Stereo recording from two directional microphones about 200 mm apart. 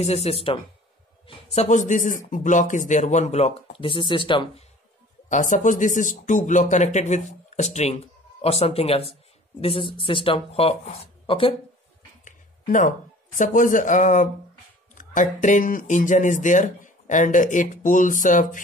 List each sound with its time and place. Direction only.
0.0 s speech: 30° left (ahead or behind)
5.3 s speech: 40° left (ahead or behind)
12.3 s a sound: 40° left (ahead or behind)
13.4 s speech: 40° left (ahead or behind)